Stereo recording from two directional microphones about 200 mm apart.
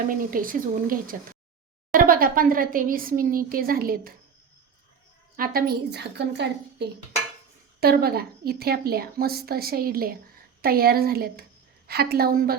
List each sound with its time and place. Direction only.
0.1 s speech: 45° right (ahead or behind)
5.4 s a woman's voice: 50° right (ahead or behind)